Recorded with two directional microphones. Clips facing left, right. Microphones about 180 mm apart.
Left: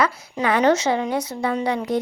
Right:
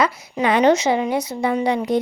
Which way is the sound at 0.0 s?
10° right (ahead or behind).